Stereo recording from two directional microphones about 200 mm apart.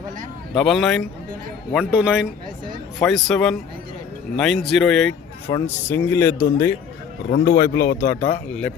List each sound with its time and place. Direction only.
0.5 s speech: centre (ahead or behind)
5.5 s speech: 15° left (ahead or behind)
7.3 s speech: 50° left (ahead or behind)